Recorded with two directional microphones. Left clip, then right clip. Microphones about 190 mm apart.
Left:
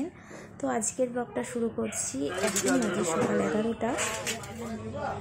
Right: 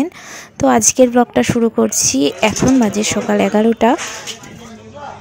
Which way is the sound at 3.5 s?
45° right (ahead or behind).